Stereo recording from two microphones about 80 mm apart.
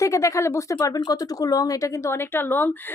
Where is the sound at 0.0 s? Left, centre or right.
Left.